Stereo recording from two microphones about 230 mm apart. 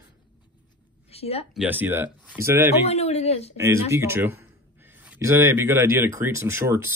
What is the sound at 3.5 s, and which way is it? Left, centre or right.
Speech, centre.